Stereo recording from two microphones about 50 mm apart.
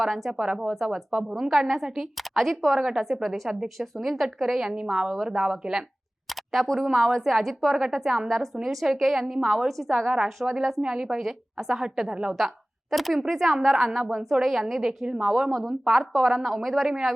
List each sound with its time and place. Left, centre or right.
0.0 s a woman's voice: centre
0.3 s a woman's voice: centre
4.7 s a woman's voice: centre
5.0 s a woman's voice: centre
12.1 s a woman's voice: centre
12.9 s a woman's voice: centre
15.4 s speech: centre
15.9 s a woman's voice: centre